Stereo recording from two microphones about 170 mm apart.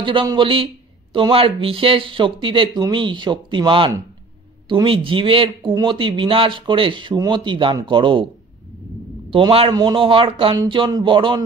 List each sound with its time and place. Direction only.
0.0 s speech: 30° right (ahead or behind)
9.3 s a man's voice: 35° right (ahead or behind)